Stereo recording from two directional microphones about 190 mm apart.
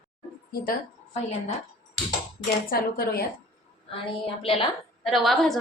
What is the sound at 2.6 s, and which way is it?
Speech, 50° left (ahead or behind).